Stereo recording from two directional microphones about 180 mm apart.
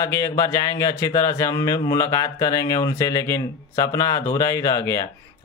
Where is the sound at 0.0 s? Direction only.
15° left (ahead or behind).